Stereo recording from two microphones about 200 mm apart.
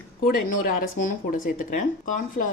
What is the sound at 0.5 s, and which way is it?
Speech, 45° left (ahead or behind).